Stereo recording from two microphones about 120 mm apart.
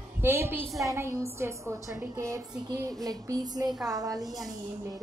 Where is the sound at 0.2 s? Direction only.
20° right (ahead or behind).